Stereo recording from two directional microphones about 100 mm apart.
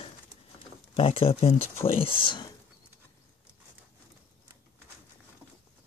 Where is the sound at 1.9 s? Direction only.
65° left (ahead or behind).